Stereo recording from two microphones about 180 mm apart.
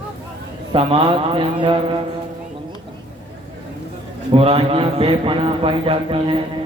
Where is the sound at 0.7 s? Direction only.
30° right (ahead or behind).